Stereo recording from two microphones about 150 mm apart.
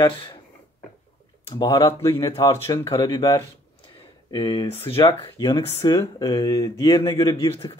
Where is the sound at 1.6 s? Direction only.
25° left (ahead or behind).